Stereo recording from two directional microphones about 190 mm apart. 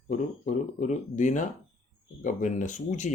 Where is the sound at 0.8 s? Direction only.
40° left (ahead or behind).